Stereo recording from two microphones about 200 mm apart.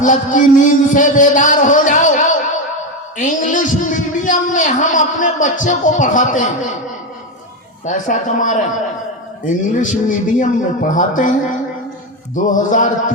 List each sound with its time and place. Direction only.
0.0 s a man's voice: 40° left (ahead or behind)
7.9 s a man's voice: 40° left (ahead or behind)